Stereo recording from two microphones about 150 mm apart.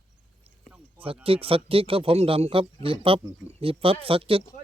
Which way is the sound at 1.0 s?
40° right (ahead or behind).